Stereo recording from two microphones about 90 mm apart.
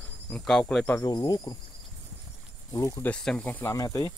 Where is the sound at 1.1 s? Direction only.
50° left (ahead or behind).